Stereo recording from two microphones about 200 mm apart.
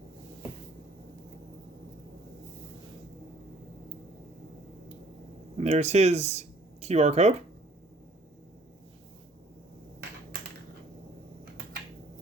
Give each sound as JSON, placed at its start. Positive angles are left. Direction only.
{"t": 5.5, "sound": "speech", "side_deg": -35}